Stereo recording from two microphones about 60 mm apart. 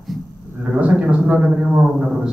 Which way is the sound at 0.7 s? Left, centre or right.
Right.